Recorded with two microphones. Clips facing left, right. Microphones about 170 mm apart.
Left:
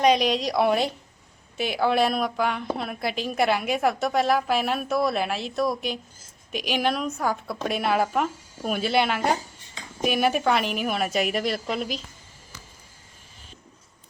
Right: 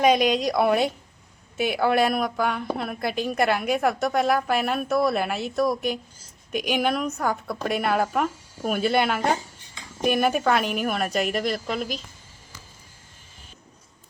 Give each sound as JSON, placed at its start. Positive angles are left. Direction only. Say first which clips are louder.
{"t": 0.0, "sound": "a woman's voice", "louder": "right 1 dB", "side_deg": 0}